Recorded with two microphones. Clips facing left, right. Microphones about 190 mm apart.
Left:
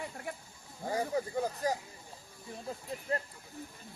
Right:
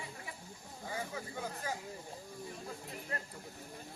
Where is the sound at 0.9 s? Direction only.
40° left (ahead or behind).